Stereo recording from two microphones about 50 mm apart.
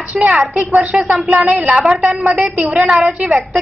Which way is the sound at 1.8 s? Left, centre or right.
Centre.